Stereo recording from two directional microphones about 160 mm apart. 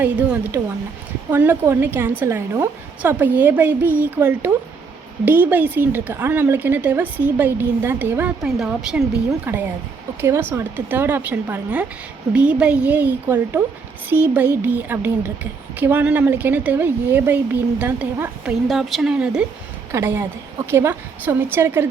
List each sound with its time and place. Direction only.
0.0 s a woman's voice: 10° right (ahead or behind)
19.9 s a woman's voice: 15° right (ahead or behind)